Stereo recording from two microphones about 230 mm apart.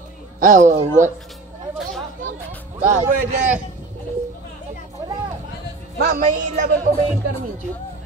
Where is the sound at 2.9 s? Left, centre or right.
Right.